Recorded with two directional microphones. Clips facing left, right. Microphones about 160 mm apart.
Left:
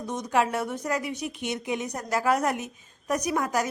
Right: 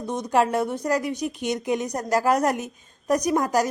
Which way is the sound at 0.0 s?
30° right (ahead or behind).